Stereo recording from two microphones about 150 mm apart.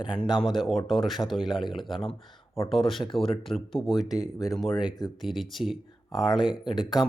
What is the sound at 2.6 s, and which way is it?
Speech, centre (ahead or behind).